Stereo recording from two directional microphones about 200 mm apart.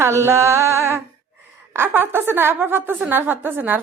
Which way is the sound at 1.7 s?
10° right (ahead or behind).